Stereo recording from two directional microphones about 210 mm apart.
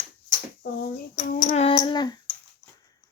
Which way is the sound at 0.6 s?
50° left (ahead or behind).